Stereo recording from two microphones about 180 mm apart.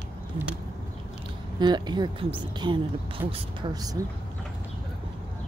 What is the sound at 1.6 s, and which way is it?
Speech, 25° right (ahead or behind).